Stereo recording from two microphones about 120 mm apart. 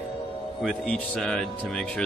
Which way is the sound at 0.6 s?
5° left (ahead or behind).